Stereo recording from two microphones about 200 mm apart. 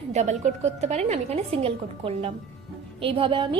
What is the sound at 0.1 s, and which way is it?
A woman's voice, 35° right (ahead or behind).